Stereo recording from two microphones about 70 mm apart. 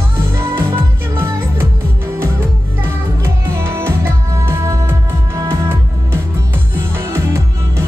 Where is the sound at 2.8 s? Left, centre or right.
Right.